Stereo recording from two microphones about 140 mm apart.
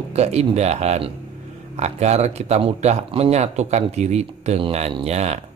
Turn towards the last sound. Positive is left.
turn(degrees=-50)  # may be behind; listen again after turning